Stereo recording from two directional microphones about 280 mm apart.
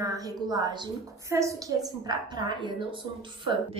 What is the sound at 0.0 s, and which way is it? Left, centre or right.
A woman's voice, centre.